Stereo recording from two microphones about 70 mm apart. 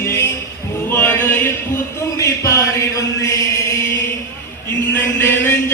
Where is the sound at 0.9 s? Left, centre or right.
Left.